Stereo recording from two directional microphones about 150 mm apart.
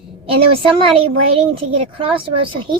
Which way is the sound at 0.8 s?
40° right (ahead or behind).